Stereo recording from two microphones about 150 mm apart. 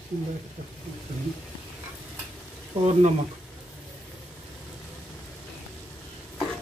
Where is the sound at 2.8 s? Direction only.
50° right (ahead or behind).